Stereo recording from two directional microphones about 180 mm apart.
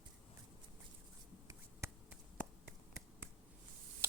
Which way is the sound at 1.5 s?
15° right (ahead or behind).